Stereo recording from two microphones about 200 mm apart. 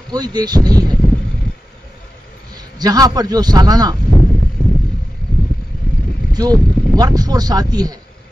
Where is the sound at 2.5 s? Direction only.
20° right (ahead or behind).